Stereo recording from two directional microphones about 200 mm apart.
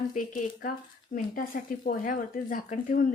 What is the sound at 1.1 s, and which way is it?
Speech, 40° left (ahead or behind).